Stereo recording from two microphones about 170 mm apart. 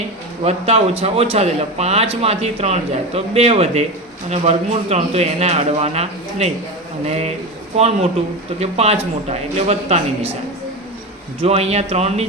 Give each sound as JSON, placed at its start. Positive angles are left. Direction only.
{"t": 0.4, "sound": "speech", "side_deg": -40}
{"t": 11.4, "sound": "speech", "side_deg": -40}